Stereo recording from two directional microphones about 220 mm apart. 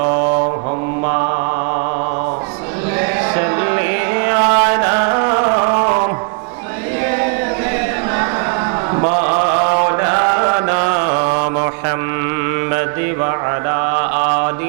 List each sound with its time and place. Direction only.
1.0 s mantra: 25° right (ahead or behind)
3.0 s mantra: 15° right (ahead or behind)
9.0 s mantra: 25° right (ahead or behind)
13.2 s mantra: 20° right (ahead or behind)